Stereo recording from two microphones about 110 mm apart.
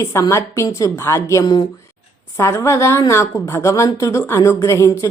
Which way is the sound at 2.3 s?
25° left (ahead or behind).